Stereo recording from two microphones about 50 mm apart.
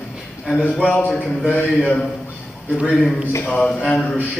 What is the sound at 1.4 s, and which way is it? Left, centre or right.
Mantra, left.